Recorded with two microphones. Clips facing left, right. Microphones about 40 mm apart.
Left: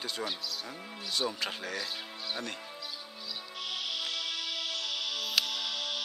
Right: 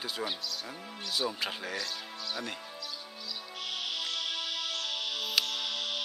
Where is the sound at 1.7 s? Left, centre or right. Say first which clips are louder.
Even; centre.